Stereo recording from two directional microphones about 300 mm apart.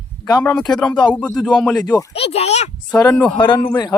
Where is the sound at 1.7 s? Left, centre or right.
Centre.